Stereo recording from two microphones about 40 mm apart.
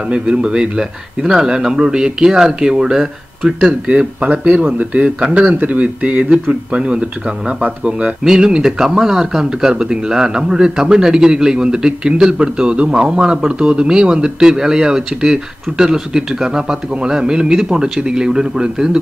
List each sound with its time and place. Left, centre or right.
0.1 s speech: right